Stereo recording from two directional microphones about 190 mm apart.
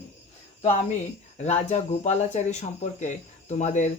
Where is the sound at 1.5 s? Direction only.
35° left (ahead or behind).